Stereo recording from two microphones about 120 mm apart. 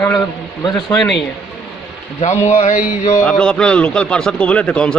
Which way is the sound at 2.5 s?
85° left.